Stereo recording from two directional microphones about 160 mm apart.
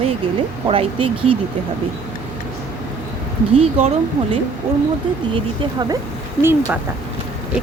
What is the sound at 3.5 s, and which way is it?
Speech, 40° right (ahead or behind).